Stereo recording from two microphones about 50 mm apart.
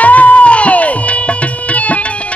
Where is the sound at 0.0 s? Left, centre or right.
Left.